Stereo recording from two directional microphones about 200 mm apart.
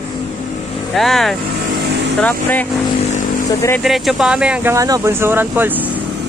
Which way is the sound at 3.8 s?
Centre (ahead or behind).